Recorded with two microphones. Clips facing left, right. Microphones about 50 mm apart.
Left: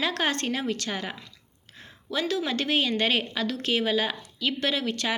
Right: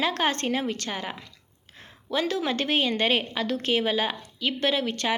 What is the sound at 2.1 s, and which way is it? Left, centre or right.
A woman's voice, right.